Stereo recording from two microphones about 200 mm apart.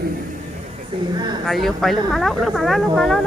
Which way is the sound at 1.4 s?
Centre (ahead or behind).